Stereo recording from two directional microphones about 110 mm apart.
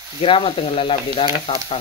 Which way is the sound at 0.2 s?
55° left (ahead or behind).